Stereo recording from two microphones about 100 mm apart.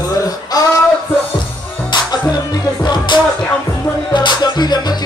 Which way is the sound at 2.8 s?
45° left (ahead or behind).